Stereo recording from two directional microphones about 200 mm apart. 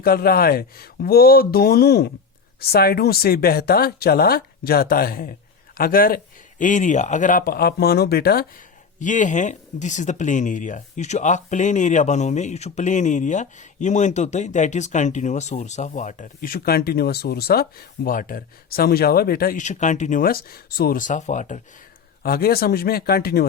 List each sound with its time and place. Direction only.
0.0 s speech: 50° left (ahead or behind)
9.0 s speech: 40° left (ahead or behind)
22.2 s speech: 50° left (ahead or behind)